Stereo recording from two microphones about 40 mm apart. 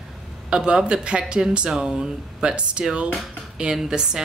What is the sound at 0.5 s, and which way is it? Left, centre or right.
Speech, right.